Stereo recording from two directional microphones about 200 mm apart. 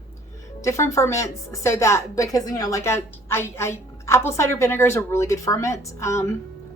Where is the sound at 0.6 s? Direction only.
15° left (ahead or behind).